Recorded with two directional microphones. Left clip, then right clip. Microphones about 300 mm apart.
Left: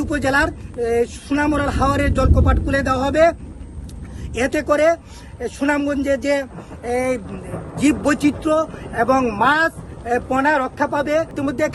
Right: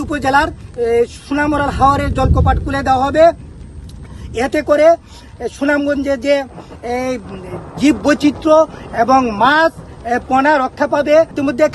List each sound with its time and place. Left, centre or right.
0.0 s speech: centre
4.4 s speech: centre